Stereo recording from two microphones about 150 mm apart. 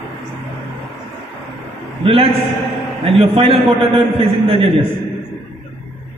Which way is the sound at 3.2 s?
35° right (ahead or behind).